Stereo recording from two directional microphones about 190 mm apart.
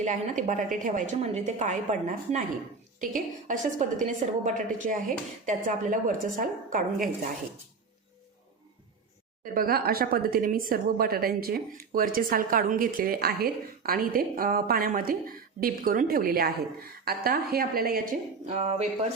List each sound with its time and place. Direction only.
0.0 s a woman's voice: 40° right (ahead or behind)
9.4 s speech: 50° right (ahead or behind)